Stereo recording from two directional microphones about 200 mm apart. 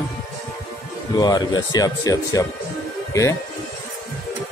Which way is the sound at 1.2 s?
20° left (ahead or behind).